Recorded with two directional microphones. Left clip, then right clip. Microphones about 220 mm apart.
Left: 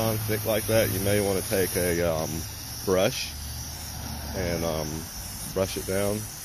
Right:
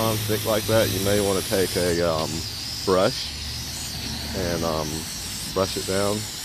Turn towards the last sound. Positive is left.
turn(degrees=20)  # may be behind; listen again after turning